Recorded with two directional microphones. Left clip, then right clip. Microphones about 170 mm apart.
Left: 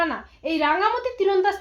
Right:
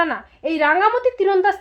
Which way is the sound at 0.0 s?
45° right (ahead or behind).